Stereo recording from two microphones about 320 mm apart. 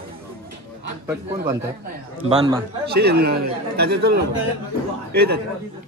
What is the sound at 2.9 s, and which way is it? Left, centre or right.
Speech, right.